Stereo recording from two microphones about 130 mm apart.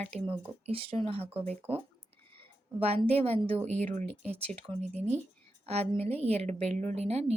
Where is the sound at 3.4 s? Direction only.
50° right (ahead or behind).